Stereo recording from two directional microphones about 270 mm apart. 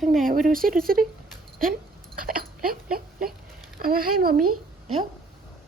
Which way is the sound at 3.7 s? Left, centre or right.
Right.